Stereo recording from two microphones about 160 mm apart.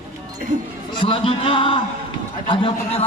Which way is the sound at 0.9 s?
30° left (ahead or behind).